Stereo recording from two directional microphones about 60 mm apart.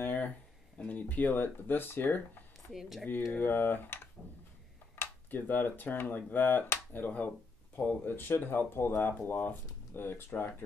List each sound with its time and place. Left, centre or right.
0.0 s a sound: left
0.7 s speech: left
2.7 s speech: centre
3.3 s speech: left
5.0 s a sound: left
5.3 s speech: left